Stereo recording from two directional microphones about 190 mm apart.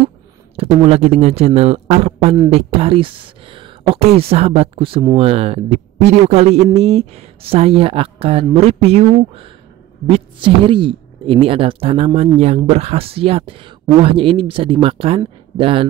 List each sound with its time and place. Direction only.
0.6 s a man's voice: 30° right (ahead or behind)